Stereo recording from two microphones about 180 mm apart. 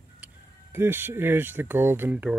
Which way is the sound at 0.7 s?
10° right (ahead or behind).